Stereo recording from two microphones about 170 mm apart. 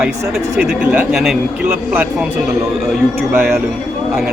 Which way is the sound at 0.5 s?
5° right (ahead or behind).